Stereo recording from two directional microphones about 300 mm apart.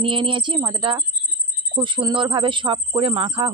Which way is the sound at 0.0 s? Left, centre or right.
Centre.